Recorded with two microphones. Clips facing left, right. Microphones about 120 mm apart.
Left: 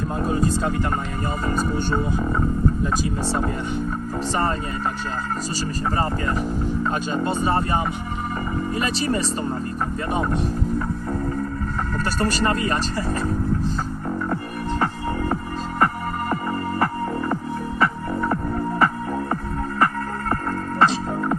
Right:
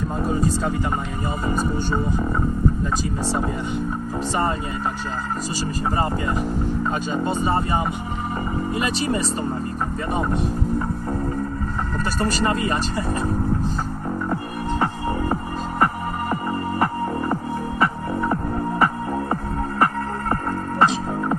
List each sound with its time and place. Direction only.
0.2 s speech: centre (ahead or behind)
1.5 s speech: 15° right (ahead or behind)
3.2 s speech: 5° right (ahead or behind)
6.0 s speech: 10° right (ahead or behind)
12.2 s speech: 5° right (ahead or behind)
16.5 s music: 20° right (ahead or behind)